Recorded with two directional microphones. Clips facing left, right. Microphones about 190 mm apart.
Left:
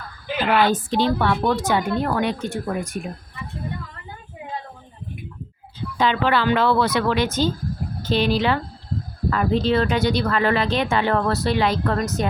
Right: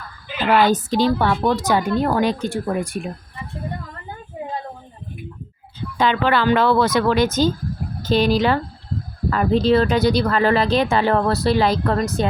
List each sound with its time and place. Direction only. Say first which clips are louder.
0.5 s speech: right 3 dB; 40° right (ahead or behind)
6.0 s speech: right 2 dB; 50° right (ahead or behind); by 12.3 s 30° right (ahead or behind)